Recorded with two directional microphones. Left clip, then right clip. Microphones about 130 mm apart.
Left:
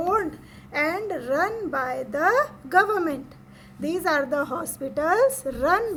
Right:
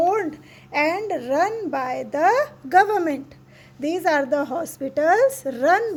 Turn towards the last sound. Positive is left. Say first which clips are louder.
# right 3 dB
turn(degrees=-25)  # may be behind; listen again after turning